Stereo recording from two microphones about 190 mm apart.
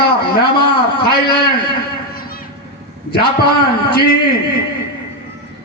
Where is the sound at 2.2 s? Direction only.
50° left (ahead or behind).